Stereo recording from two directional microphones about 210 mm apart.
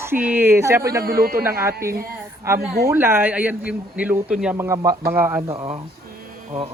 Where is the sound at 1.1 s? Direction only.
45° right (ahead or behind).